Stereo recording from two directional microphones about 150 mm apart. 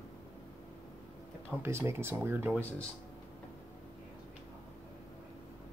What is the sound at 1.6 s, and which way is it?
Speech, 15° right (ahead or behind).